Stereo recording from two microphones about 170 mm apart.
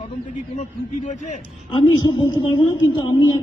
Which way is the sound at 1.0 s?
45° left (ahead or behind).